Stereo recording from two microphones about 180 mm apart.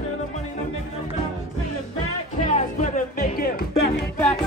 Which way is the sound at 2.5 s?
40° left (ahead or behind).